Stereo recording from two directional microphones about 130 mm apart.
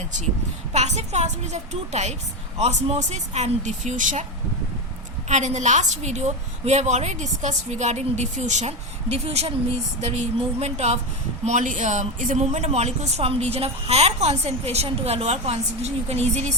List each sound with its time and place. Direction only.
0.7 s speech: 60° right (ahead or behind); by 4.3 s 75° right (ahead or behind)
5.3 s speech: 65° right (ahead or behind)
11.4 s speech: 70° right (ahead or behind)